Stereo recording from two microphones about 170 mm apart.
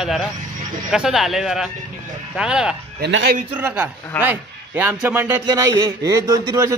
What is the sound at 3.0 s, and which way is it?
Speech, 90° right.